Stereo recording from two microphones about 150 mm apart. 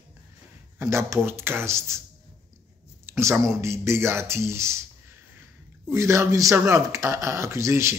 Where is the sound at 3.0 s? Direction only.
15° right (ahead or behind).